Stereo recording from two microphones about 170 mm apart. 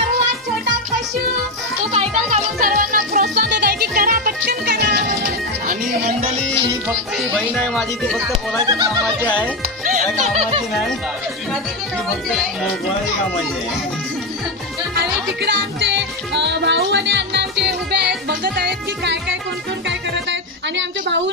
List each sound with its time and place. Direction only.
1.9 s music: 35° right (ahead or behind)
2.6 s music: 55° right (ahead or behind)
6.2 s music: 30° right (ahead or behind)
7.2 s speech: centre (ahead or behind)
8.6 s music: 20° right (ahead or behind)
9.8 s speech: 45° right (ahead or behind)
15.0 s music: 80° right